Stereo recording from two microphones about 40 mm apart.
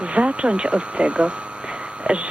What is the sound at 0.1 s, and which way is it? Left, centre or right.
Speech, right.